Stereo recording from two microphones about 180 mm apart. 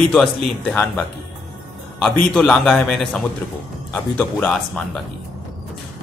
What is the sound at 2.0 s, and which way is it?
A man's voice, 5° left (ahead or behind).